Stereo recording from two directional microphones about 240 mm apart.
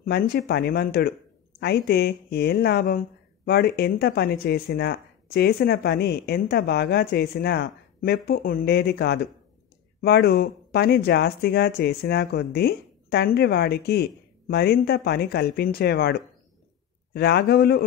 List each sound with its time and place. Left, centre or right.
0.0 s speech: left